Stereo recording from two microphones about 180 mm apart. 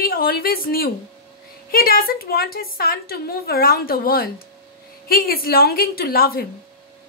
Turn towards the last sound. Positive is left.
turn(degrees=55)  # may be behind; listen again after turning